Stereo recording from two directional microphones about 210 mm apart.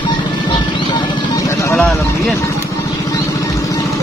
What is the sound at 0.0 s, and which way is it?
Music, 20° left (ahead or behind).